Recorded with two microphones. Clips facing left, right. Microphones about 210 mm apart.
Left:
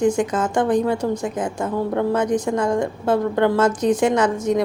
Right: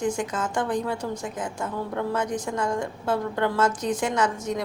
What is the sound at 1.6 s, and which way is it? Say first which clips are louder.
Speech: left 9 dB; 45° left (ahead or behind).